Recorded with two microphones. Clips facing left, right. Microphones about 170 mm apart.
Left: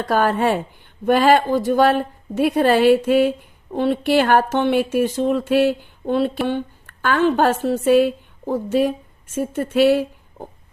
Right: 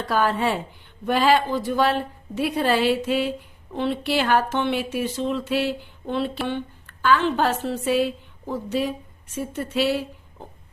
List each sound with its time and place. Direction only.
0.0 s a woman's voice: 50° left (ahead or behind)